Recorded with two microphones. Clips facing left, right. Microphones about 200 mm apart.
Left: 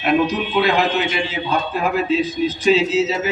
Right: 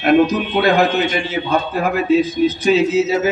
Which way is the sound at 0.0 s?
45° right (ahead or behind).